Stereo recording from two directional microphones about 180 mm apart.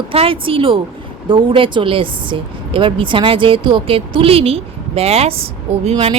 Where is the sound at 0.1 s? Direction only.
30° right (ahead or behind).